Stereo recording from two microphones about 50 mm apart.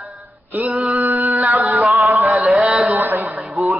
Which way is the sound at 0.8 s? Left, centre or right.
Right.